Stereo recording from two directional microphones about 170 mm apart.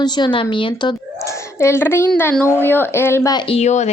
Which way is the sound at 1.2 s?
15° left (ahead or behind).